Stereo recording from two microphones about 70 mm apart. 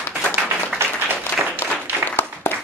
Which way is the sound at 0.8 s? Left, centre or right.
Right.